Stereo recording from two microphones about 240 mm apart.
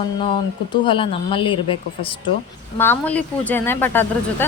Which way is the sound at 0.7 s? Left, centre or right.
Left.